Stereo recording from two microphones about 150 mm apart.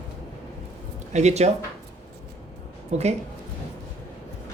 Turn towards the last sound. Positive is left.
turn(degrees=-45)  # may be behind; listen again after turning